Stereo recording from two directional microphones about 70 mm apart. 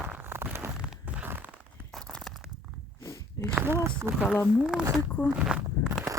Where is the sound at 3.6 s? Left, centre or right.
Right.